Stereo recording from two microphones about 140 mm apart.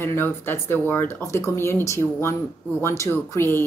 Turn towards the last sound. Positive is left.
turn(degrees=15)  # may be behind; listen again after turning